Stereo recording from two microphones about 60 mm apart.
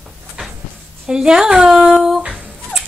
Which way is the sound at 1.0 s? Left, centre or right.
Centre.